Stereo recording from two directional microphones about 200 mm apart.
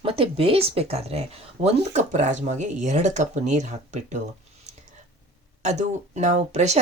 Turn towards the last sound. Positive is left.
turn(degrees=-35)  # may be behind; listen again after turning